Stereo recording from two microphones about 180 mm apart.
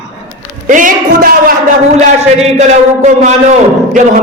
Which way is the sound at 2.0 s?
35° right (ahead or behind).